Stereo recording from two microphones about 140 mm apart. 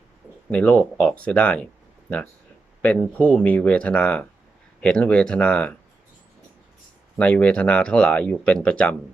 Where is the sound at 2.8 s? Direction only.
10° left (ahead or behind).